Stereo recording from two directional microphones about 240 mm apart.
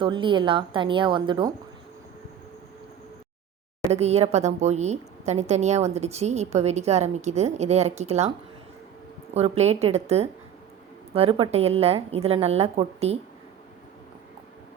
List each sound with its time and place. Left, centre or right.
0.0 s a woman's voice: centre
3.9 s a woman's voice: right
9.3 s a woman's voice: right